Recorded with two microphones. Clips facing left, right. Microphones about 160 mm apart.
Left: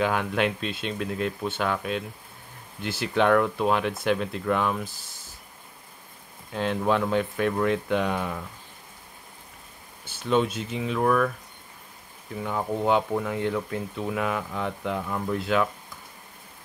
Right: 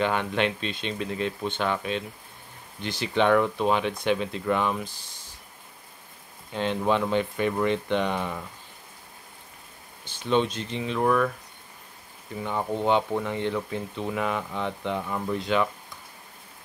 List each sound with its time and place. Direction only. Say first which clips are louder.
0.0 s speech: even; 5° left (ahead or behind)
6.5 s speech: even; centre (ahead or behind)
10.0 s speech: even; 5° left (ahead or behind)